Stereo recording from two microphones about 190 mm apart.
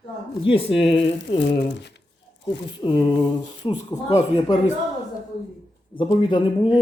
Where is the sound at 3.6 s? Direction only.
40° left (ahead or behind).